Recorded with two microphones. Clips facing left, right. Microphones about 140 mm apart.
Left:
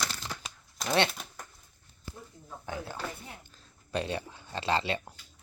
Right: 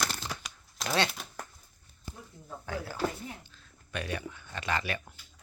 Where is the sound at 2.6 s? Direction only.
20° left (ahead or behind).